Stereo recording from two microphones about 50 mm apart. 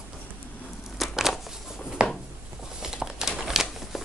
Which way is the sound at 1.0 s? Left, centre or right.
Centre.